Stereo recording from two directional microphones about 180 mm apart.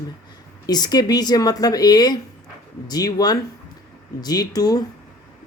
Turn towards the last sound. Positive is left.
turn(degrees=20)  # may be behind; listen again after turning